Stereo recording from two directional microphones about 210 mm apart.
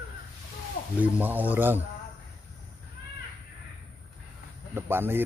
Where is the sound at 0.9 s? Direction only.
10° right (ahead or behind).